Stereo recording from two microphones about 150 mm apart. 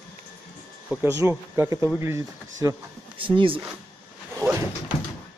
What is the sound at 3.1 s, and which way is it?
Speech, 35° right (ahead or behind).